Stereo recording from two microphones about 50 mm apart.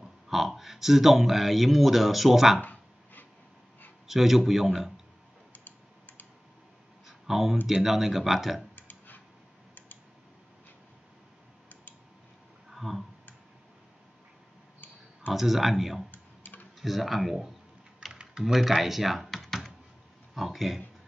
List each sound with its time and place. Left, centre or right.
0.0 s a sound: centre
0.6 s speech: centre
2.6 s a sound: left
4.1 s speech: centre
7.1 s a sound: centre
7.6 s speech: centre
8.7 s clicking: left
12.7 s clicking: centre
15.3 s speech: centre
16.1 s a sound: left
16.8 s speech: centre
18.1 s typing: centre
18.4 s speech: centre